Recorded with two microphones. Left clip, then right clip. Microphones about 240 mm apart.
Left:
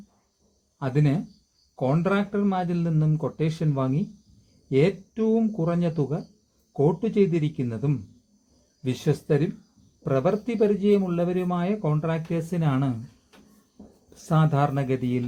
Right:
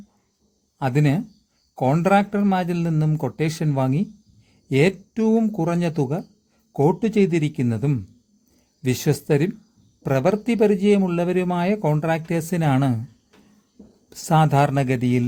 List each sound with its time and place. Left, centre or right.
0.8 s speech: right
14.3 s speech: right